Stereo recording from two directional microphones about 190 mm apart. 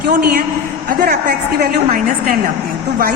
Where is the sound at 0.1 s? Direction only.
50° right (ahead or behind).